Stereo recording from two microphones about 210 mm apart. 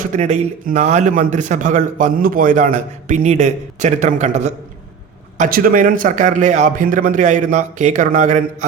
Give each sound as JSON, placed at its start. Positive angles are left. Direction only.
{"t": 0.1, "sound": "speech", "side_deg": -35}